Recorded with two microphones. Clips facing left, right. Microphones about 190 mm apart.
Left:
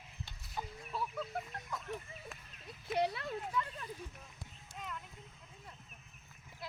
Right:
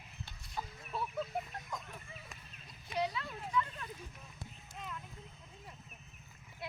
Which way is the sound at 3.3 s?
30° left (ahead or behind).